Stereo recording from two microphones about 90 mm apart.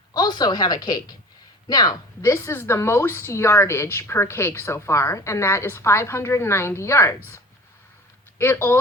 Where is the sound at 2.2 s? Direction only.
30° left (ahead or behind).